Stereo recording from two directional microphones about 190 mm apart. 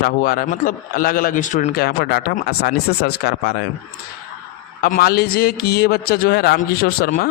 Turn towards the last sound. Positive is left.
turn(degrees=55)  # may be behind; listen again after turning